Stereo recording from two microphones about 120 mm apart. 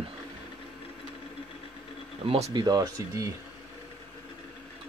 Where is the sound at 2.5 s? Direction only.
35° right (ahead or behind).